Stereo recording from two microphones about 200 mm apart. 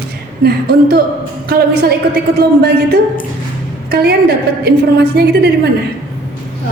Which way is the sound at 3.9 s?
55° right (ahead or behind).